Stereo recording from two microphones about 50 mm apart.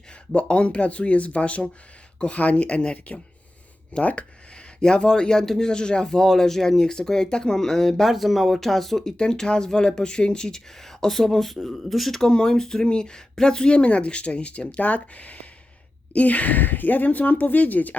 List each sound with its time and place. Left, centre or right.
0.3 s speech: left